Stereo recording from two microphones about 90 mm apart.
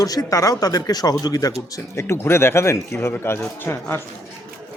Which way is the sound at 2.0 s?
30° left (ahead or behind).